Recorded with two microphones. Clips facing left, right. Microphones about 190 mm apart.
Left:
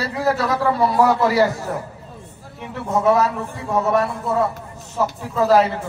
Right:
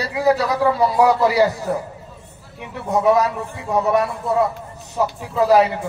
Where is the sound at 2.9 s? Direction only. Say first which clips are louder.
Right 1 dB; 15° right (ahead or behind).